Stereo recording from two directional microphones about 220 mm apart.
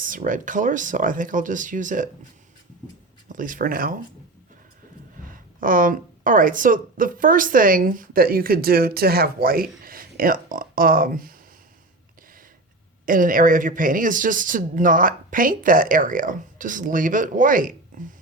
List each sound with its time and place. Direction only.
0.0 s a woman's voice: 35° right (ahead or behind)
3.2 s a woman's voice: 35° right (ahead or behind)
5.5 s a woman's voice: 40° right (ahead or behind)
13.1 s a woman's voice: 40° right (ahead or behind)